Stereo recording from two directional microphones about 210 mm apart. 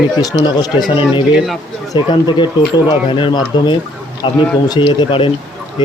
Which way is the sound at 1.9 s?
20° left (ahead or behind).